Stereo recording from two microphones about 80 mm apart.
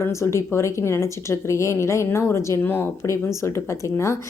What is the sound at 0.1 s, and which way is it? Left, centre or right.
Speech, left.